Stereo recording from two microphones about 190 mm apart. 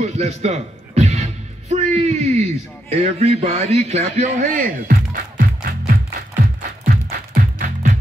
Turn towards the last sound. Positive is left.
turn(degrees=-45)  # may be behind; listen again after turning